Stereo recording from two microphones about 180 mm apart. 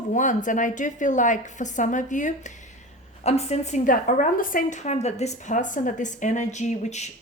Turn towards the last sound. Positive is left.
turn(degrees=40)  # may be behind; listen again after turning